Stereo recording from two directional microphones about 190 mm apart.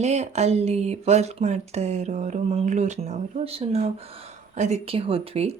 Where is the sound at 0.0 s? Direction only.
35° right (ahead or behind).